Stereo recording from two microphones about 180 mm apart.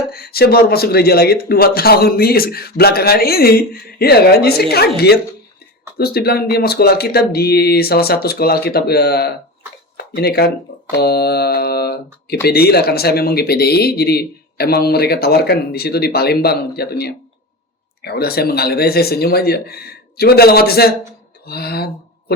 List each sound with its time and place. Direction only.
0.1 s speech: 60° left (ahead or behind)